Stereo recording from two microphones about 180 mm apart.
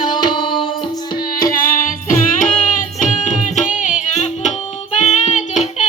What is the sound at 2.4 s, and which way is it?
Music, 45° left (ahead or behind).